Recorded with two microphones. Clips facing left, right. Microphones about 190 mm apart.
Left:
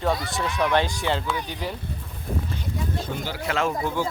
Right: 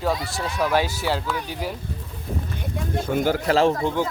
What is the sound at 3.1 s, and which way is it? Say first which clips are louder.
Speech: right 10 dB; 50° right (ahead or behind).